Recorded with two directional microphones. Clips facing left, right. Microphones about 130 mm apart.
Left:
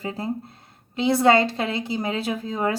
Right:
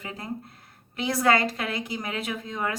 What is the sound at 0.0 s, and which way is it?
A woman's voice, 30° left (ahead or behind).